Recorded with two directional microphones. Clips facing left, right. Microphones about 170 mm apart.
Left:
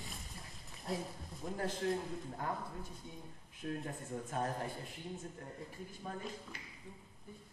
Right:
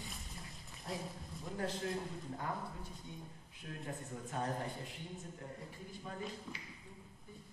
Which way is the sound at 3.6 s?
45° left (ahead or behind).